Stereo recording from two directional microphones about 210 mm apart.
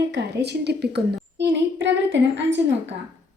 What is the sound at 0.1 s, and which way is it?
A child's voice, 55° right (ahead or behind).